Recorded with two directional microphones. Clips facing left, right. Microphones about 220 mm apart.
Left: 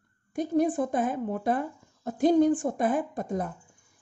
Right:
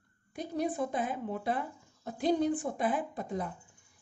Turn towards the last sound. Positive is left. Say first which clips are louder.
# left 5 dB
turn(degrees=45)  # may be behind; listen again after turning